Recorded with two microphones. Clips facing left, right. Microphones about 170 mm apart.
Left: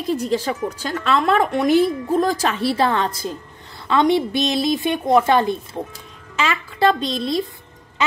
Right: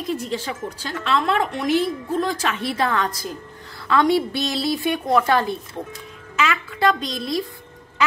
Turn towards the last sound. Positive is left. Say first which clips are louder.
# left 3 dB
turn(degrees=25)  # may be behind; listen again after turning